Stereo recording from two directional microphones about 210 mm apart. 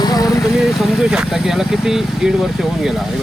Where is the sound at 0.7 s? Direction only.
Centre (ahead or behind).